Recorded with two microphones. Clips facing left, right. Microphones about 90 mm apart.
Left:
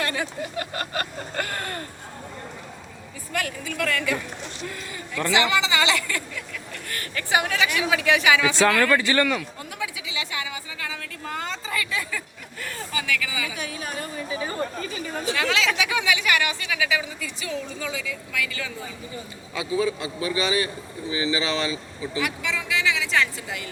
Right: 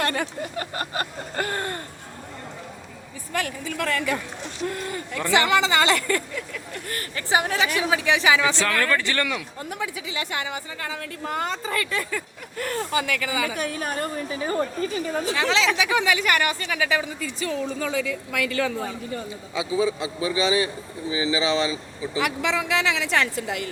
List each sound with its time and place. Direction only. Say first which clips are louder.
0.0 s a woman's voice: right 2 dB; 50° right (ahead or behind)
0.6 s a sound: right 1 dB; 25° right (ahead or behind)
3.3 s a woman's voice: right 1 dB; 30° right (ahead or behind)
6.8 s speech: even; 30° right (ahead or behind)
8.5 s speech: left 4 dB; 15° left (ahead or behind)
9.6 s a woman's voice: right 2 dB; 45° right (ahead or behind)
15.3 s speech: even; 25° right (ahead or behind)
16.4 s a woman's voice: right 2 dB; 45° right (ahead or behind)
19.5 s speech: right 1 dB; 20° right (ahead or behind)
22.2 s a woman's voice: right 5 dB; 60° right (ahead or behind)